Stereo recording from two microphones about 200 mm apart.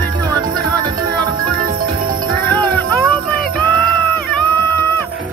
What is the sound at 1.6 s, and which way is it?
Music, 45° right (ahead or behind).